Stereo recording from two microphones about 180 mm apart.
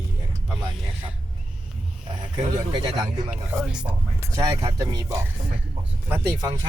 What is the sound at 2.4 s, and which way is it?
Speech, 25° right (ahead or behind).